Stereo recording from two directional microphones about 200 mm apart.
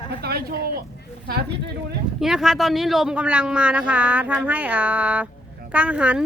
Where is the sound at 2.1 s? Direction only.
Centre (ahead or behind).